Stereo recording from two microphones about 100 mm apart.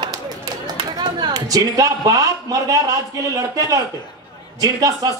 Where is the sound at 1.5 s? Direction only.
40° right (ahead or behind).